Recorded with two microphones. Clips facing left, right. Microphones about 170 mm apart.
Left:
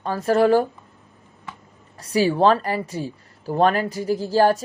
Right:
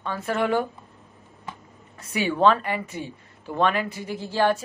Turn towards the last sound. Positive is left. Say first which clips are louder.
# left 5 dB
turn(degrees=40)  # may be behind; listen again after turning